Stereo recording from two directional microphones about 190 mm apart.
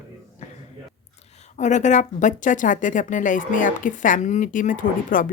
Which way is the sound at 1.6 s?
40° left (ahead or behind).